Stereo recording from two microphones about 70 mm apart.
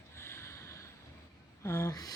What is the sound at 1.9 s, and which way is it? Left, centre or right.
Gasp, left.